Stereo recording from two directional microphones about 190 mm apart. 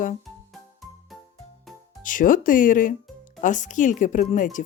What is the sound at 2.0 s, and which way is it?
Speech, 45° left (ahead or behind).